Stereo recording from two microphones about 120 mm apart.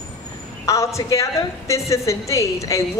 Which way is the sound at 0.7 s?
25° left (ahead or behind).